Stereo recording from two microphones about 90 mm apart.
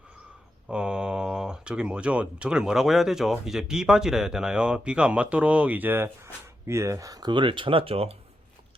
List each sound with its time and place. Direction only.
0.7 s speech: 10° right (ahead or behind); by 7.3 s 40° right (ahead or behind)
7.3 s speech: 65° right (ahead or behind); by 8.1 s 90° right